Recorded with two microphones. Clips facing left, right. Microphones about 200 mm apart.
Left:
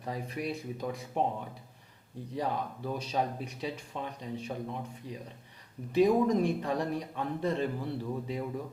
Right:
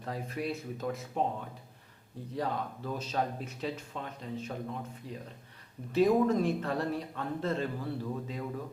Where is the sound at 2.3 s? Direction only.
10° left (ahead or behind).